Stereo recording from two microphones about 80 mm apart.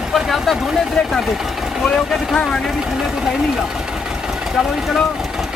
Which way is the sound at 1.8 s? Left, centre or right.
Centre.